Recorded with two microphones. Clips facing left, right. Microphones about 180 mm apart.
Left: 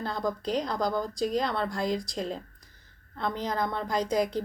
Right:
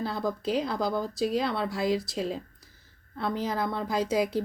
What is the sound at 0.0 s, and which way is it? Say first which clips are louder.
A woman's voice: right 1 dB; 5° right (ahead or behind).